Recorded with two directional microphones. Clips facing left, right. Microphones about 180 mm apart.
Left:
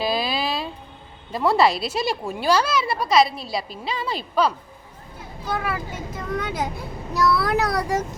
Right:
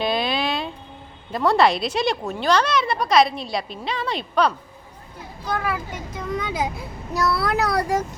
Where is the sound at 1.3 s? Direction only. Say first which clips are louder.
Right 1 dB; 5° left (ahead or behind).